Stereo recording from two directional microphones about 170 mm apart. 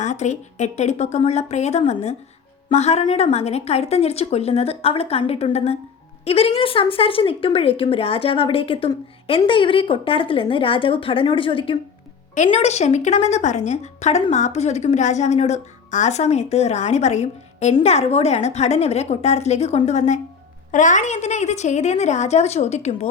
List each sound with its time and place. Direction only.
0.0 s speech: 45° left (ahead or behind)
12.3 s speech: 45° left (ahead or behind)